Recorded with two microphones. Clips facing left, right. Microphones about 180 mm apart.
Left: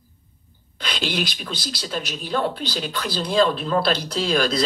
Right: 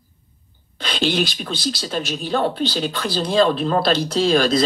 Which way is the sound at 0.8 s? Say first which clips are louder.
Right 5 dB; 25° right (ahead or behind).